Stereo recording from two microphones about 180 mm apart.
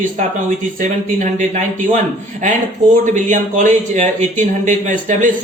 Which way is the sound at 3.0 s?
45° right (ahead or behind).